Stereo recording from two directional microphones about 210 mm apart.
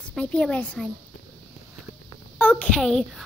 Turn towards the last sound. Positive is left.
turn(degrees=0)  # may be behind; listen again after turning